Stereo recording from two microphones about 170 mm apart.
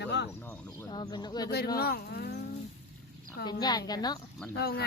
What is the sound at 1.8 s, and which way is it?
Speech, 65° left (ahead or behind).